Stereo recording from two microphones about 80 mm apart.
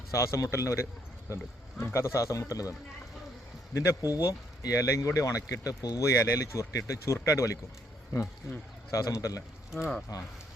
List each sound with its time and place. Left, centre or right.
0.1 s speech: left
3.8 s speech: left
6.1 s speech: left
8.9 s a man's voice: left